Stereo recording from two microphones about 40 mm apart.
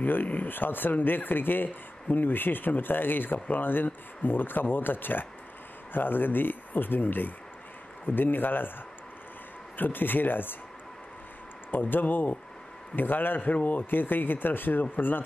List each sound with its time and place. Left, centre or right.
0.0 s a man's voice: left
9.8 s a man's voice: left
11.7 s a man's voice: left
13.8 s a man's voice: left